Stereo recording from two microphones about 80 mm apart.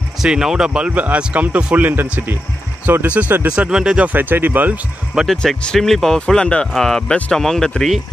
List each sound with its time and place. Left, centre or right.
0.2 s speech: centre
0.7 s speech: centre
5.2 s speech: centre